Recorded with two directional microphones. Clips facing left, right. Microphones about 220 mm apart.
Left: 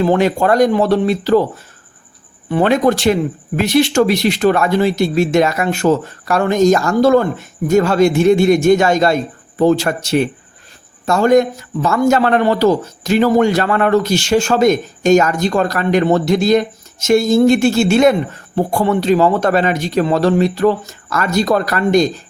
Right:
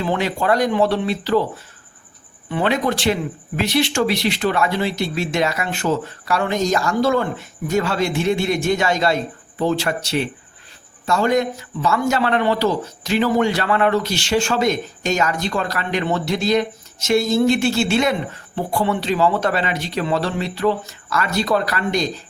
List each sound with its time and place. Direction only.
0.0 s a man's voice: 45° left (ahead or behind)
2.5 s a man's voice: 45° left (ahead or behind)